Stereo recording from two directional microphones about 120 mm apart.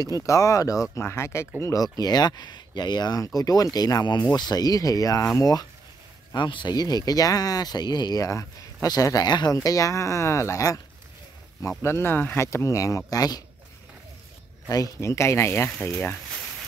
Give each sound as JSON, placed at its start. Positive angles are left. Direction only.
{"t": 0.0, "sound": "speech", "side_deg": 30}
{"t": 11.8, "sound": "speech", "side_deg": 20}
{"t": 14.7, "sound": "speech", "side_deg": 25}